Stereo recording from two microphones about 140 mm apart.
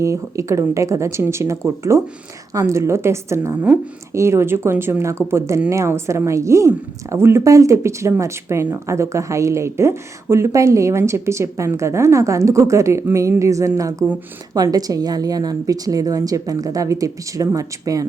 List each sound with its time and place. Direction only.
0.0 s speech: 20° right (ahead or behind)